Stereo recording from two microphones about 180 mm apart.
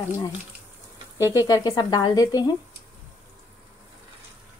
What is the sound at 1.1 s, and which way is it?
Speech, 20° left (ahead or behind).